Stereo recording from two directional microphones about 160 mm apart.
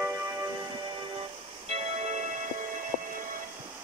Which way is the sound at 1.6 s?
45° right (ahead or behind).